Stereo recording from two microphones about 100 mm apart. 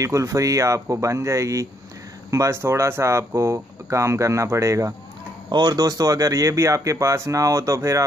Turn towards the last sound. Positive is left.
turn(degrees=-30)  # may be behind; listen again after turning